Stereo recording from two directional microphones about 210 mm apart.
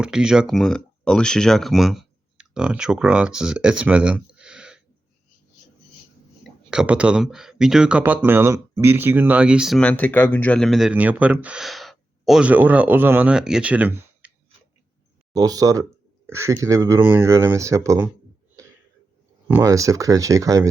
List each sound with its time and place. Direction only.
0.0 s speech: 5° right (ahead or behind)
6.4 s speech: 5° right (ahead or behind)
15.4 s speech: 15° right (ahead or behind)
19.5 s speech: 10° right (ahead or behind)